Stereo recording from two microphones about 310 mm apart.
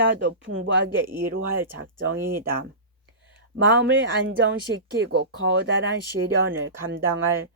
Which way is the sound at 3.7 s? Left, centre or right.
Right.